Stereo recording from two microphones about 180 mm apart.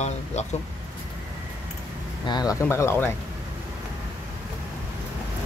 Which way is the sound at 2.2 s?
20° left (ahead or behind).